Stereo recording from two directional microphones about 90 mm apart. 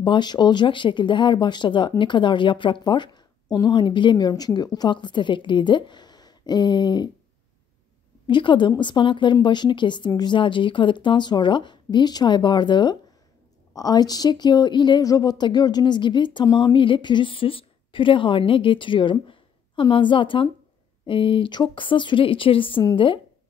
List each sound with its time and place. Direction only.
0.0 s a woman's voice: 60° left (ahead or behind)
8.3 s a woman's voice: 60° left (ahead or behind)
13.7 s speech: 45° left (ahead or behind)
15.0 s a woman's voice: 45° left (ahead or behind); by 23.2 s 70° left (ahead or behind)